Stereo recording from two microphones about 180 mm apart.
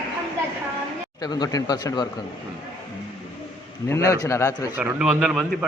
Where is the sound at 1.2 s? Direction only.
20° left (ahead or behind).